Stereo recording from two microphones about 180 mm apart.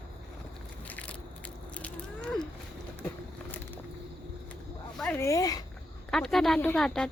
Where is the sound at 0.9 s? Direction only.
10° left (ahead or behind).